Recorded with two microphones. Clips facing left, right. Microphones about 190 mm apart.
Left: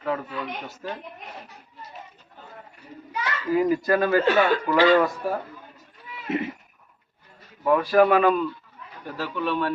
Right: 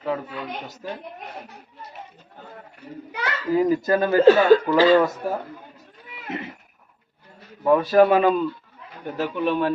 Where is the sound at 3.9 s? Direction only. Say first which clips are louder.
Right 8 dB; 25° right (ahead or behind).